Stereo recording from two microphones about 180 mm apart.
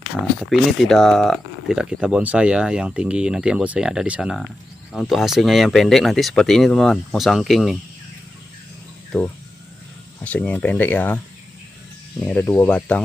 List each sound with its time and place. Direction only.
0.4 s speech: centre (ahead or behind)
9.1 s speech: 5° left (ahead or behind)
12.2 s speech: 5° left (ahead or behind)